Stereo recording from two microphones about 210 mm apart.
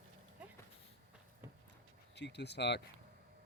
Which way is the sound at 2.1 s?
55° left (ahead or behind).